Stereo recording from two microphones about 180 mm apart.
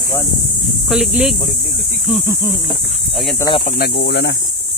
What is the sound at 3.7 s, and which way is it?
Speech, 60° left (ahead or behind).